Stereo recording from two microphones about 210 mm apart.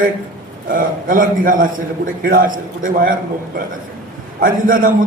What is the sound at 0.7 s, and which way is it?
A man's voice, 40° right (ahead or behind).